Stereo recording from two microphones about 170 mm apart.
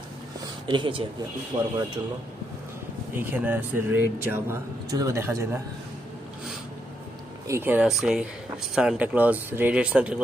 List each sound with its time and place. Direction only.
0.7 s speech: 30° right (ahead or behind)
3.2 s speech: 10° right (ahead or behind)
7.4 s speech: 15° right (ahead or behind)